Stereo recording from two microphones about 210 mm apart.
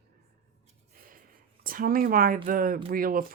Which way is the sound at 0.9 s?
45° right (ahead or behind).